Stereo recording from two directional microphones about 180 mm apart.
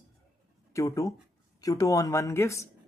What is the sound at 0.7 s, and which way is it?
Speech, 15° left (ahead or behind).